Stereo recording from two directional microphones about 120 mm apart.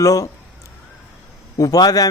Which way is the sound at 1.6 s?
30° left (ahead or behind).